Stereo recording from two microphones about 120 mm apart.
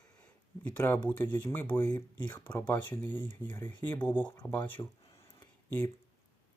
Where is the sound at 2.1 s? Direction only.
35° left (ahead or behind).